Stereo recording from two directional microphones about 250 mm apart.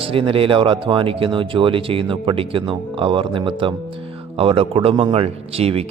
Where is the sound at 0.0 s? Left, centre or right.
Right.